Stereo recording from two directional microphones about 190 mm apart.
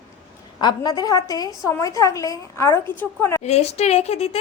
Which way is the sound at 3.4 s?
35° left (ahead or behind).